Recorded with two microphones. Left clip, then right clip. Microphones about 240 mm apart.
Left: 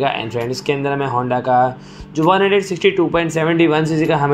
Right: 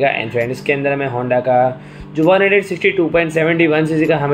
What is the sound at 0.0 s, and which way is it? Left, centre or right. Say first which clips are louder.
Speech: right 3 dB; centre.